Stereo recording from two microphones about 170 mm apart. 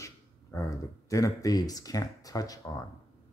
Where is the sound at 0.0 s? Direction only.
20° left (ahead or behind).